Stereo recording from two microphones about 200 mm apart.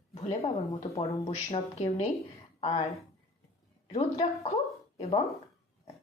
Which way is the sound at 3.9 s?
30° left (ahead or behind).